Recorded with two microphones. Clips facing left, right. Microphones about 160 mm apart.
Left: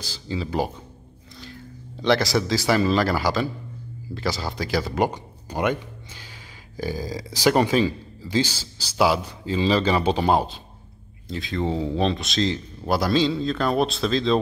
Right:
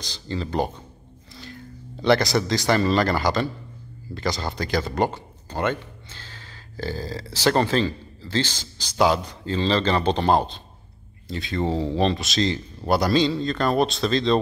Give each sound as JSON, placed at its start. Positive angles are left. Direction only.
{"t": 0.0, "sound": "speech", "side_deg": 5}